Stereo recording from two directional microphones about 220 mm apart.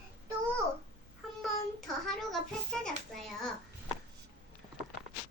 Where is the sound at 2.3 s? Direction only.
Centre (ahead or behind).